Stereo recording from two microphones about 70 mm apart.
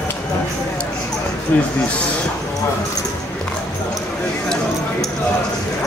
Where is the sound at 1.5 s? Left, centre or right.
Left.